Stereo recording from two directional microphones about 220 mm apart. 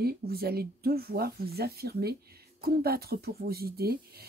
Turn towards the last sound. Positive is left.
turn(degrees=-45)  # may be behind; listen again after turning